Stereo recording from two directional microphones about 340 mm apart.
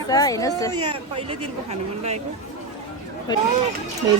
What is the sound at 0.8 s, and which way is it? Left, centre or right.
Speech, centre.